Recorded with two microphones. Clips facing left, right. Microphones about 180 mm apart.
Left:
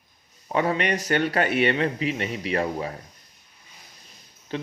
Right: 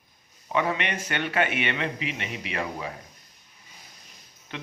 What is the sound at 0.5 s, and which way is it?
Speech, 40° left (ahead or behind).